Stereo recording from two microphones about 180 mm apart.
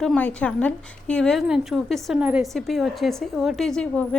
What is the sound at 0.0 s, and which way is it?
A woman's voice, 5° left (ahead or behind).